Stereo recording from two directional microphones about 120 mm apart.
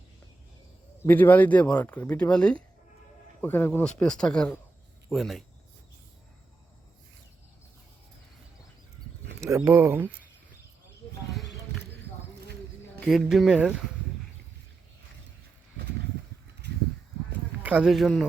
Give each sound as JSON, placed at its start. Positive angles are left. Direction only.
{"t": 1.0, "sound": "speech", "side_deg": 15}
{"t": 4.0, "sound": "speech", "side_deg": 5}
{"t": 9.6, "sound": "speech", "side_deg": -20}
{"t": 11.3, "sound": "a sound", "side_deg": 0}
{"t": 13.0, "sound": "speech", "side_deg": 0}
{"t": 17.6, "sound": "a sound", "side_deg": -10}